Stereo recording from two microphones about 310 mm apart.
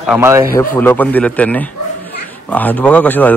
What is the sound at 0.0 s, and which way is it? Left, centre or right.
Speech, centre.